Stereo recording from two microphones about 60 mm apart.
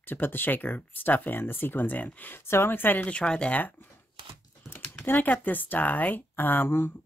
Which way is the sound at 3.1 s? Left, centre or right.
Centre.